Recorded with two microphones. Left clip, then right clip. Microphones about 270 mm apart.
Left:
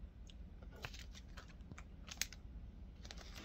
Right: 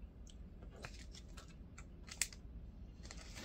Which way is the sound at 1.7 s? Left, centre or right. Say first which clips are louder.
Right 1 dB; left.